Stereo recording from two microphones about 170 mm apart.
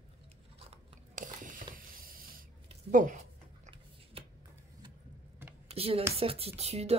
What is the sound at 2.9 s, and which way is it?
Speech, 50° right (ahead or behind).